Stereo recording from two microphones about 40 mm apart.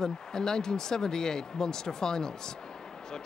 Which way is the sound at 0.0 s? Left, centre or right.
Centre.